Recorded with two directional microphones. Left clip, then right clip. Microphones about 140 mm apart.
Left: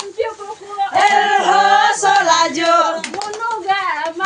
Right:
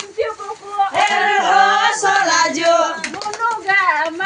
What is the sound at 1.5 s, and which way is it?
Music, 80° left.